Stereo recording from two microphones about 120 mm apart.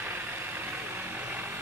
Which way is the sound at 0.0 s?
15° right (ahead or behind).